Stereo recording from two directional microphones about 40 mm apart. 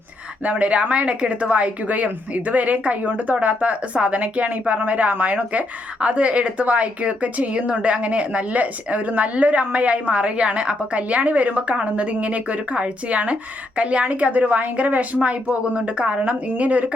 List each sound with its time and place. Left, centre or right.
0.4 s a woman's voice: right